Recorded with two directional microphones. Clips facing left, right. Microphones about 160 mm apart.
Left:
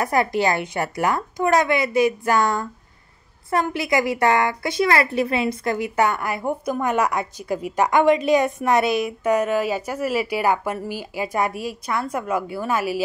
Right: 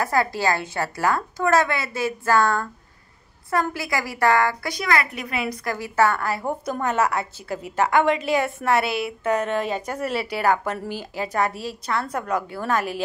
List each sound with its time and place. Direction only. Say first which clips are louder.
0.0 s a woman's voice: left 2 dB; 20° left (ahead or behind)